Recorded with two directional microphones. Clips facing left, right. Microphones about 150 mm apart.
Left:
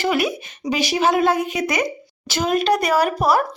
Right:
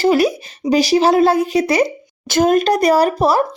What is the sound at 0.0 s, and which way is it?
A woman's voice, 35° right (ahead or behind).